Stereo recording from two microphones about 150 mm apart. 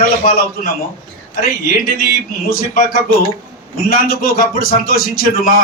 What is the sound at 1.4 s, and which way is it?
A man's voice, 75° left (ahead or behind).